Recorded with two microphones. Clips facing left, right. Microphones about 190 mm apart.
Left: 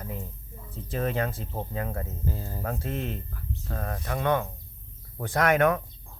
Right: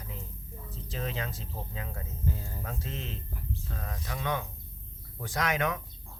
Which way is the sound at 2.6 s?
55° left (ahead or behind).